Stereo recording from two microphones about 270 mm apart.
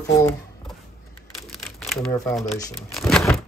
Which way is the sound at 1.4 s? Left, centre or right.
Centre.